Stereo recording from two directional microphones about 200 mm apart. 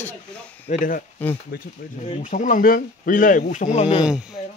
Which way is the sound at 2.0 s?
35° left (ahead or behind).